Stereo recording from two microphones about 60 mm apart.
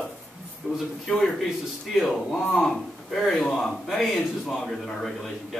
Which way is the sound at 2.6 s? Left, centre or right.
Centre.